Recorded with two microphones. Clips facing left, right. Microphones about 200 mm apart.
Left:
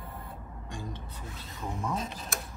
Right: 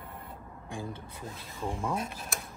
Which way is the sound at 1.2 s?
30° right (ahead or behind).